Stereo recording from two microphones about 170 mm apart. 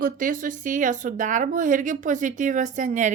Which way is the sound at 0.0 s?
55° right (ahead or behind).